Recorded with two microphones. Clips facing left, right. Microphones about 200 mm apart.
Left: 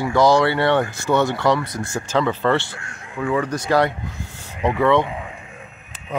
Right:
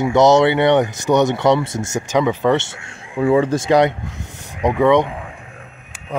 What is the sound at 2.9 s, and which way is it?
Speech, 30° right (ahead or behind).